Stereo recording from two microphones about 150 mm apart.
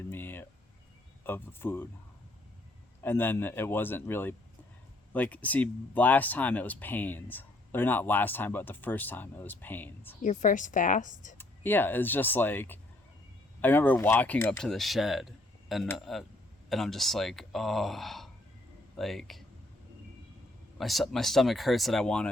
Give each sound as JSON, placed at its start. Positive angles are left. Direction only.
{"t": 0.1, "sound": "a sound", "side_deg": 15}
{"t": 1.2, "sound": "speech", "side_deg": 15}
{"t": 3.0, "sound": "speech", "side_deg": 15}
{"t": 10.2, "sound": "a woman's voice", "side_deg": 60}
{"t": 11.3, "sound": "speech", "side_deg": 15}
{"t": 14.7, "sound": "speech", "side_deg": 0}
{"t": 20.7, "sound": "speech", "side_deg": 0}